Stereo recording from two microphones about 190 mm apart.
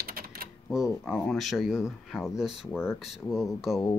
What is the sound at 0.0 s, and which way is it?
Typewriter, 50° right (ahead or behind).